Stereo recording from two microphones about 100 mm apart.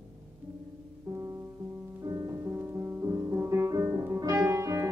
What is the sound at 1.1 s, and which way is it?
Music, 30° right (ahead or behind).